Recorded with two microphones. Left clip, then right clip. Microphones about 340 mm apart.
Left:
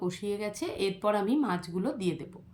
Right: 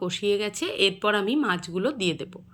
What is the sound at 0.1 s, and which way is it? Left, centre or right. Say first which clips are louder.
A woman's voice: right 9 dB; centre.